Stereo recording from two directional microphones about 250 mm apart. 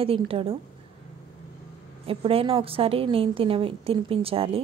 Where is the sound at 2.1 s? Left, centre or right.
Right.